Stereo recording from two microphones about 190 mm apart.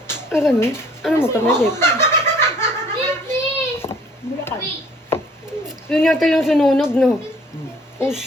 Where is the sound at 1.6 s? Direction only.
10° left (ahead or behind).